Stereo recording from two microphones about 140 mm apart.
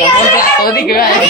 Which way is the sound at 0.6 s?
90° left.